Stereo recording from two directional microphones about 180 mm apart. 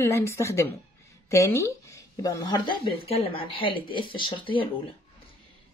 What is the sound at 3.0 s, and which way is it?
Speech, 30° left (ahead or behind).